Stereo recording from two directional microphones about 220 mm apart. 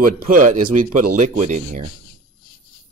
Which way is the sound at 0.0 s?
40° right (ahead or behind).